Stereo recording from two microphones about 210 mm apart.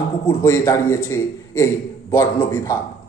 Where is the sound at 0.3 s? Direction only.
15° left (ahead or behind).